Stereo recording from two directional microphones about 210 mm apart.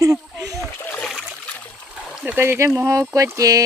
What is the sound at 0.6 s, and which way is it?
Splash, 5° left (ahead or behind).